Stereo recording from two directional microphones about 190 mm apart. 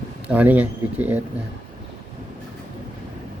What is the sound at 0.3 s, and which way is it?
Speech, 5° right (ahead or behind).